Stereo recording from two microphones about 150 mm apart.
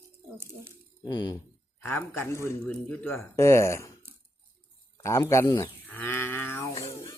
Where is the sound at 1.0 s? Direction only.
30° left (ahead or behind).